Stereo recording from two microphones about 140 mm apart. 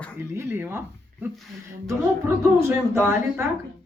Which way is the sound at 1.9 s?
20° right (ahead or behind).